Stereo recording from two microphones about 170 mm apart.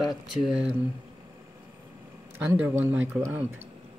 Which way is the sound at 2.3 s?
10° right (ahead or behind).